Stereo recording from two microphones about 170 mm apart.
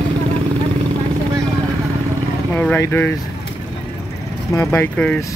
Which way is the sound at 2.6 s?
10° left (ahead or behind).